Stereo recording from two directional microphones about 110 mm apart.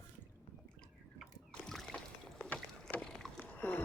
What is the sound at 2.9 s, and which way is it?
Boat, 5° left (ahead or behind).